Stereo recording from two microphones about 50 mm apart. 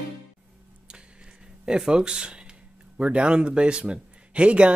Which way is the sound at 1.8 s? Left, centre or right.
Centre.